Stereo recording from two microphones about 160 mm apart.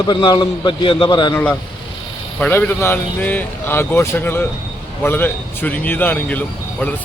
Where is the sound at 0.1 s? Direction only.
30° left (ahead or behind).